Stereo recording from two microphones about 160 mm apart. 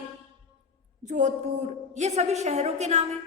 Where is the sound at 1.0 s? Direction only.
50° right (ahead or behind).